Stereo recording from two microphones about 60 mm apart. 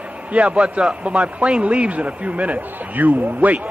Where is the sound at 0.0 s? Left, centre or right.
Right.